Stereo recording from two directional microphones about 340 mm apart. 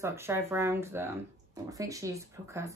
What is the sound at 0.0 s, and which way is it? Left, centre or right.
Speech, centre.